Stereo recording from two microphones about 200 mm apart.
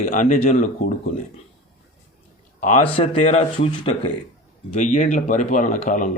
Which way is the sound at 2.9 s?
30° left (ahead or behind).